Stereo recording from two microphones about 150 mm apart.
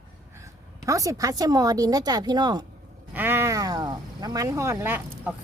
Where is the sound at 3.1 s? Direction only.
15° right (ahead or behind).